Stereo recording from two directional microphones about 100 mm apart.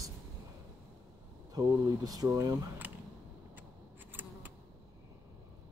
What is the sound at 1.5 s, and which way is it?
Speech, 40° right (ahead or behind).